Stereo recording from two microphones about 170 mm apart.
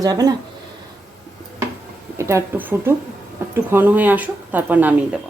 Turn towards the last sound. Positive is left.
turn(degrees=-10)  # may be behind; listen again after turning